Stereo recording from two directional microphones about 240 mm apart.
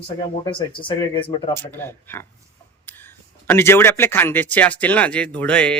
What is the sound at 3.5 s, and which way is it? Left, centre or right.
Speech, centre.